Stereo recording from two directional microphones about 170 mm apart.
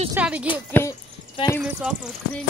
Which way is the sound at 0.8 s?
15° left (ahead or behind).